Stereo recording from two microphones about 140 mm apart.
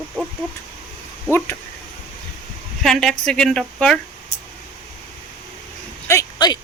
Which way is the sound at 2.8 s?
5° left (ahead or behind).